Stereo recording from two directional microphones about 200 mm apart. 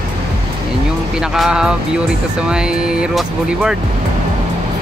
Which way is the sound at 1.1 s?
Centre (ahead or behind).